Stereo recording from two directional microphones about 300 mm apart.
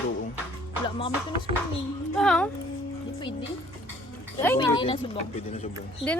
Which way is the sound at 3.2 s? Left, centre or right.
Centre.